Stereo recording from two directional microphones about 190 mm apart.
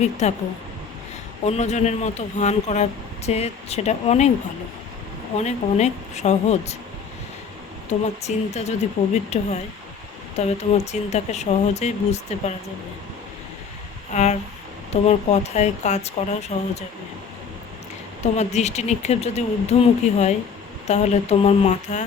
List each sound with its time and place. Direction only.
0.0 s speech: 35° left (ahead or behind)
1.5 s speech: 35° left (ahead or behind)
5.4 s speech: 35° left (ahead or behind)
7.9 s speech: 35° left (ahead or behind)
14.1 s speech: 35° left (ahead or behind)
18.2 s speech: 35° left (ahead or behind)